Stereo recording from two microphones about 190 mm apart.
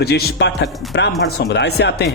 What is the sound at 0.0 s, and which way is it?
Speech, 60° left (ahead or behind).